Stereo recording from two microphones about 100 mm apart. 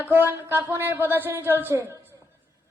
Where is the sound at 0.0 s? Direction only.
20° right (ahead or behind).